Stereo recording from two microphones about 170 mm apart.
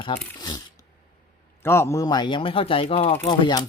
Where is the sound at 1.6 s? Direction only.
15° left (ahead or behind).